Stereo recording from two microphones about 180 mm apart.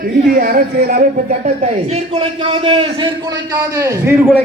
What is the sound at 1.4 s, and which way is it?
A man's voice, 40° right (ahead or behind).